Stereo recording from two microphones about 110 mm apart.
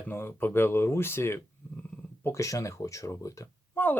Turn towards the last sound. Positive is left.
turn(degrees=15)  # may be behind; listen again after turning